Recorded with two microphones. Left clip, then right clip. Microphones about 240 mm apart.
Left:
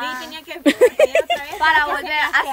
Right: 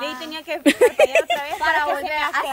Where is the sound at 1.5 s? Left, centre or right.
Centre.